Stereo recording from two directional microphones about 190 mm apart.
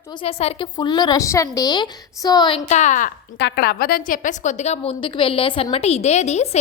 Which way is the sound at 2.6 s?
40° left (ahead or behind).